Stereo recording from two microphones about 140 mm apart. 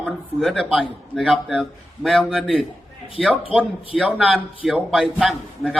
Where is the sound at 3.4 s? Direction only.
40° left (ahead or behind).